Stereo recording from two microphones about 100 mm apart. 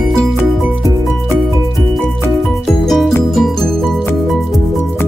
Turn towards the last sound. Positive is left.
turn(degrees=5)  # may be behind; listen again after turning